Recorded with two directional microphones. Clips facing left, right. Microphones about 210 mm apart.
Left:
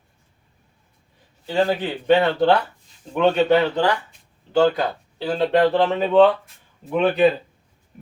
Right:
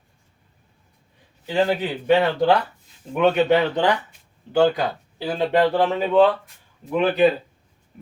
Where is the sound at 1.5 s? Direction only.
15° right (ahead or behind).